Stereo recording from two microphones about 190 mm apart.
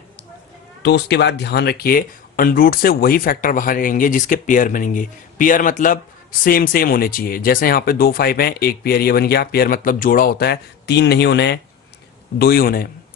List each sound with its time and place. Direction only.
0.8 s speech: 65° left (ahead or behind)